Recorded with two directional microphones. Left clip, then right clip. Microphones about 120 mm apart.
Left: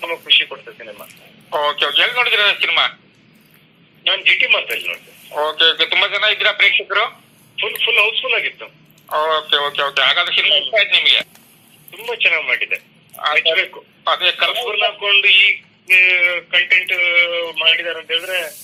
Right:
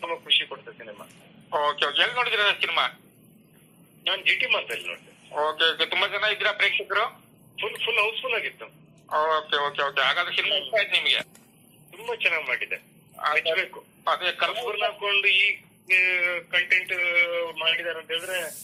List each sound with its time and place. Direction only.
0.0 s speech: 30° left (ahead or behind)
4.0 s speech: 30° left (ahead or behind)